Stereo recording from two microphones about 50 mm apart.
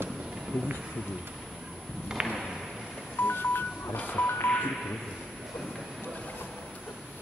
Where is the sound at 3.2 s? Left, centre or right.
Left.